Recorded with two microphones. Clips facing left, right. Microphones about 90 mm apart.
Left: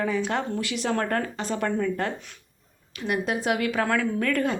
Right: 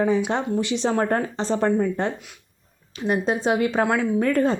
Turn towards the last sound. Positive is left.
turn(degrees=-30)  # may be behind; listen again after turning